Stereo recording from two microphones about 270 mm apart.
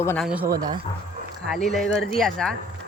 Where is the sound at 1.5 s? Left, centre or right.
Centre.